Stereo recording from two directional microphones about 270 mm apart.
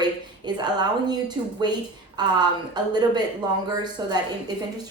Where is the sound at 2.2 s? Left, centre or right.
Centre.